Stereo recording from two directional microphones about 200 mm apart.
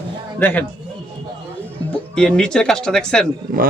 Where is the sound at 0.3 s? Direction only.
10° left (ahead or behind).